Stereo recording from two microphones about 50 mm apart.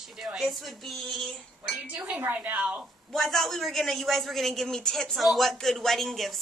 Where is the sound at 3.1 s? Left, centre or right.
Centre.